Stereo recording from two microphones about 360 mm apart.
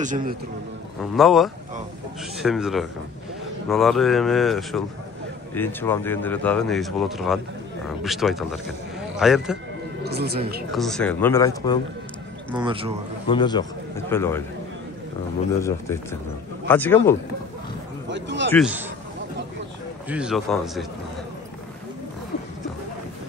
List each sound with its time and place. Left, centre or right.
0.0 s speech: right
1.1 s speech: centre
10.0 s speech: right
10.7 s speech: centre
12.5 s speech: centre
13.3 s a man's voice: centre
15.6 s speech: centre
18.0 s a sound: right
18.5 s speech: centre
20.1 s speech: centre